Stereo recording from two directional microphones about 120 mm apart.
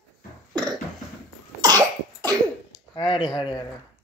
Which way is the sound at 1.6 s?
35° right (ahead or behind).